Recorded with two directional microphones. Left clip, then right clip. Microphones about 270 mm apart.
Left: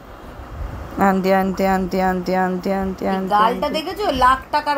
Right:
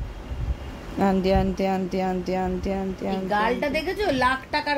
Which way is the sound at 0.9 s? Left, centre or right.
Centre.